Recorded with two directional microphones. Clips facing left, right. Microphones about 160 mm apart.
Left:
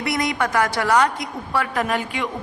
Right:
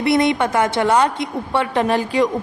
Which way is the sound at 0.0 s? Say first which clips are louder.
Right 6 dB; 25° right (ahead or behind).